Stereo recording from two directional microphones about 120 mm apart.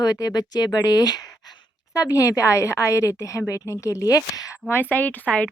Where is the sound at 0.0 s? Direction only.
35° left (ahead or behind).